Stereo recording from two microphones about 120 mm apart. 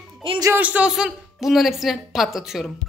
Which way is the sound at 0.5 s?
10° right (ahead or behind).